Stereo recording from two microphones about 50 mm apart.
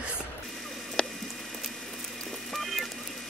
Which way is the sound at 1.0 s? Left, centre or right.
Centre.